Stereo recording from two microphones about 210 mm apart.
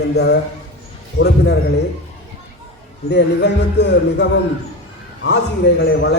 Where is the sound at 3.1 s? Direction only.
55° left (ahead or behind).